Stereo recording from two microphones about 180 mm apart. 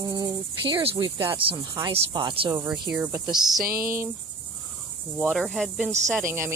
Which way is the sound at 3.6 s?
55° right (ahead or behind).